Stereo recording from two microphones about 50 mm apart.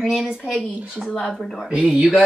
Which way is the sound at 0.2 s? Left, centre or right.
Centre.